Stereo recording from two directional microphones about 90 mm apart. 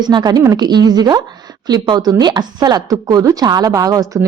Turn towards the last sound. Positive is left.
turn(degrees=-40)  # may be behind; listen again after turning